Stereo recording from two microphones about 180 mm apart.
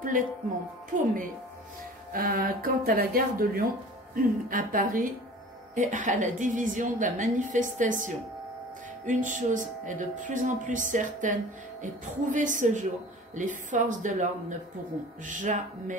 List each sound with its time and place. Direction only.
0.0 s music: 50° right (ahead or behind)
0.9 s speech: 50° right (ahead or behind)
9.0 s speech: 45° right (ahead or behind)
15.2 s speech: 45° right (ahead or behind)